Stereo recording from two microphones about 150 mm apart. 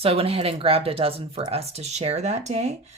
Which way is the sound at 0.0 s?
40° right (ahead or behind).